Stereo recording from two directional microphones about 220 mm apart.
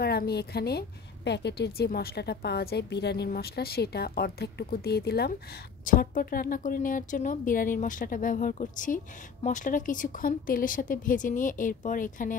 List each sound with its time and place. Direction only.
0.0 s a woman's voice: 45° left (ahead or behind)